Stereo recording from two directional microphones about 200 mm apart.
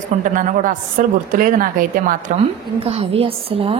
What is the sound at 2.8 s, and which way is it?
Speech, 30° right (ahead or behind).